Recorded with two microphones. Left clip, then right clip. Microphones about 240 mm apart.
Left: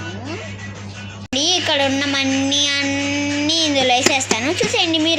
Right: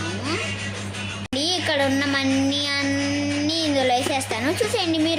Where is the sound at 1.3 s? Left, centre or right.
Centre.